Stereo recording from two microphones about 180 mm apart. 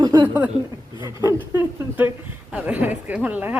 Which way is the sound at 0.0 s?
20° right (ahead or behind).